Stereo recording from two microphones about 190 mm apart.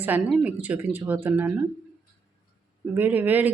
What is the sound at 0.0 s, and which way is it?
Speech, 10° right (ahead or behind).